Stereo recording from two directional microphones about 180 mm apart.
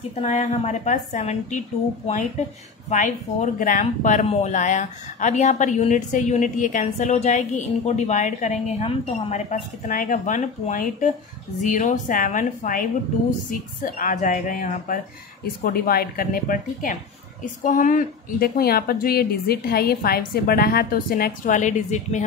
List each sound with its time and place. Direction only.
0.2 s a woman's voice: 40° left (ahead or behind)